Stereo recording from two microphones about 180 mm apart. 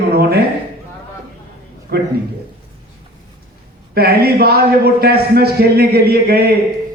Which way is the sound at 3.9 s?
60° right (ahead or behind).